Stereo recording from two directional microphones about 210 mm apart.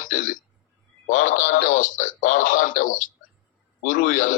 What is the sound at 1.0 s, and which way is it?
Speech, 40° left (ahead or behind).